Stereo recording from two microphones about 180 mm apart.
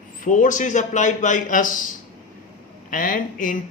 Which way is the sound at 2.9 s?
50° left (ahead or behind).